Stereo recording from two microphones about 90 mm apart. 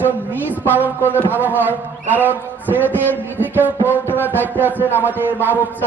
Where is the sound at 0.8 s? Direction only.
20° left (ahead or behind).